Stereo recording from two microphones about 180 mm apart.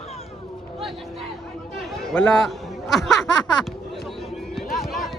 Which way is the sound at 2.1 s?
5° left (ahead or behind).